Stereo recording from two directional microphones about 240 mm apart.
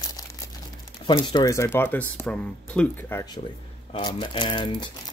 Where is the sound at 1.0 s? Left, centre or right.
Centre.